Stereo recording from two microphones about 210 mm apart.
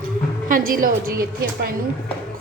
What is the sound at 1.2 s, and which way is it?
Speech, 45° right (ahead or behind).